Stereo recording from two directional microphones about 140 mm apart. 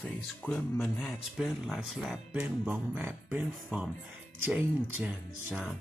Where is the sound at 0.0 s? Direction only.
10° left (ahead or behind).